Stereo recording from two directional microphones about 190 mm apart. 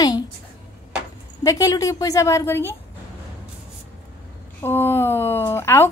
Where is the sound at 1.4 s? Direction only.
15° left (ahead or behind).